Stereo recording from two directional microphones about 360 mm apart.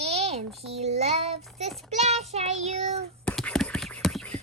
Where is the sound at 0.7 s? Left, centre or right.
Centre.